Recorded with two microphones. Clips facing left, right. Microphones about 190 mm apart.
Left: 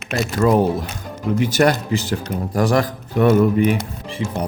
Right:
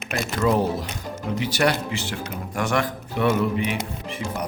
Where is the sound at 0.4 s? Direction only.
50° left (ahead or behind).